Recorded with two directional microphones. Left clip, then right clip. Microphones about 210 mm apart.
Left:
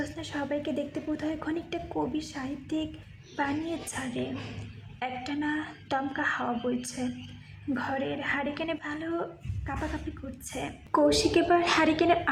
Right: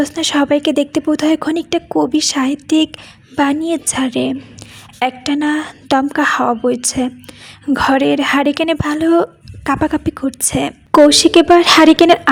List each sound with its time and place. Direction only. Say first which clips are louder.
0.0 s speech: right 19 dB; 45° right (ahead or behind)